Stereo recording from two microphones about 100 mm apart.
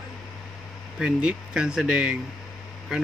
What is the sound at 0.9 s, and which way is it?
Speech, 10° right (ahead or behind).